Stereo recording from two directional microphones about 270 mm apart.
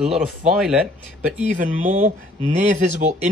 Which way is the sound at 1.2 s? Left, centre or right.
Right.